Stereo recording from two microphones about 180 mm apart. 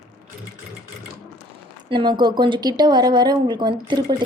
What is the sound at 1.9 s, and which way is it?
Speech, 25° right (ahead or behind).